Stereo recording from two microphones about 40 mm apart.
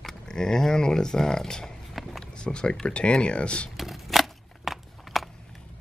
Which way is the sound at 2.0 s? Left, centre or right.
Centre.